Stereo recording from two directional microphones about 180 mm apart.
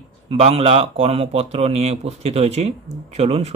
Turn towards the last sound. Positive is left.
turn(degrees=-35)  # may be behind; listen again after turning